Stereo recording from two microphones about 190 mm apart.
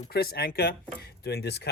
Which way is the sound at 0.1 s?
55° left (ahead or behind).